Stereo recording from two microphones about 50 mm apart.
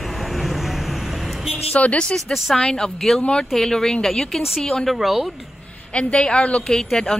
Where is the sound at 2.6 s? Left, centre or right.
Centre.